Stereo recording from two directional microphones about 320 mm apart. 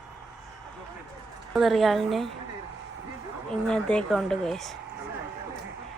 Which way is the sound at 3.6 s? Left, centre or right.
Centre.